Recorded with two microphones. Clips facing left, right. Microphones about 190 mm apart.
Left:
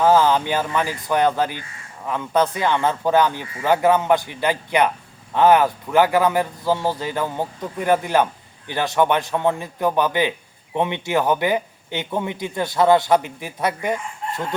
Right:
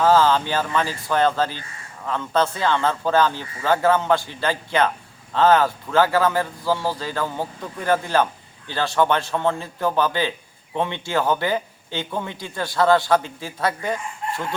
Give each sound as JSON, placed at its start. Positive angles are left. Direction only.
{"t": 0.0, "sound": "a man's voice", "side_deg": 15}